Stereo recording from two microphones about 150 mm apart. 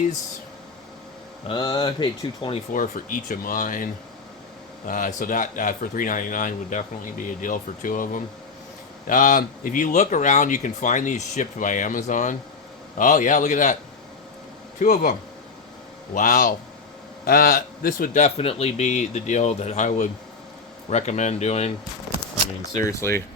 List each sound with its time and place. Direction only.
1.5 s speech: 35° left (ahead or behind)
2.7 s speech: 60° left (ahead or behind)
4.9 s speech: 65° left (ahead or behind)
14.8 s speech: 55° left (ahead or behind)
16.1 s speech: 60° left (ahead or behind)
17.2 s a man's voice: 75° left (ahead or behind); by 21.7 s 45° left (ahead or behind)
22.8 s speech: 20° left (ahead or behind)